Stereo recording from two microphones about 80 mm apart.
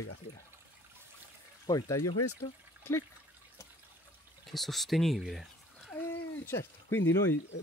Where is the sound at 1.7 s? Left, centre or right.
Left.